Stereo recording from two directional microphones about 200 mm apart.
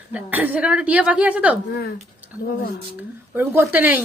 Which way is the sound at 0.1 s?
10° right (ahead or behind).